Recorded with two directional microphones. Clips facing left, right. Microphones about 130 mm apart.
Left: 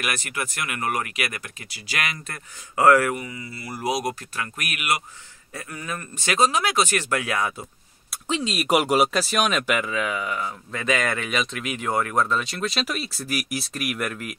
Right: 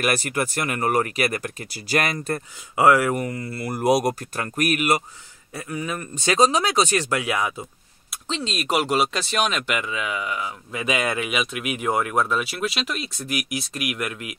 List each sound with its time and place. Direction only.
0.0 s speech: 40° right (ahead or behind)
2.7 s speech: 15° right (ahead or behind)
3.2 s speech: 50° right (ahead or behind); by 5.0 s 35° right (ahead or behind)
5.5 s speech: 15° right (ahead or behind)
8.1 s speech: 10° left (ahead or behind)